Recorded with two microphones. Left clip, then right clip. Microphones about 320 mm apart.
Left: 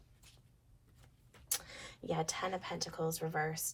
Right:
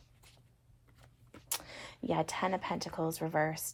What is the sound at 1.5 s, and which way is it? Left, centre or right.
A woman's voice, right.